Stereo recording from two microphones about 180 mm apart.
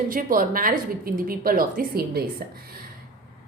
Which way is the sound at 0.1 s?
50° right (ahead or behind).